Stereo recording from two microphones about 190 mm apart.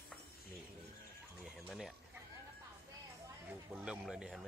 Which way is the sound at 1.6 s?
Centre (ahead or behind).